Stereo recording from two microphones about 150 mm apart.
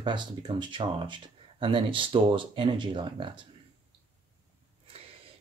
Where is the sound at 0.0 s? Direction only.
30° right (ahead or behind).